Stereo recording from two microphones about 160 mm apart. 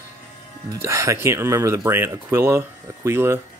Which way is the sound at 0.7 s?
20° right (ahead or behind).